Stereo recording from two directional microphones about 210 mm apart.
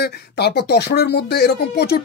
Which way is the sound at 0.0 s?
50° left (ahead or behind).